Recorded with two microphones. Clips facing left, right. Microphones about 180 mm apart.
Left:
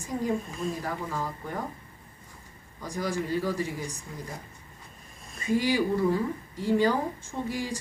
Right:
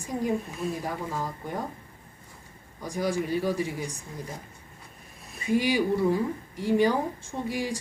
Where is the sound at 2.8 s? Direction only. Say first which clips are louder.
Right 3 dB; 15° right (ahead or behind).